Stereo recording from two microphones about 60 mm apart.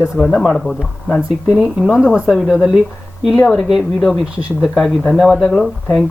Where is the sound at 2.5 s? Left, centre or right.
Centre.